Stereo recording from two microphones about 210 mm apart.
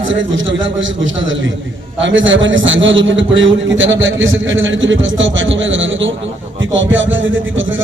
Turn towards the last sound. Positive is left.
turn(degrees=-65)  # may be behind; listen again after turning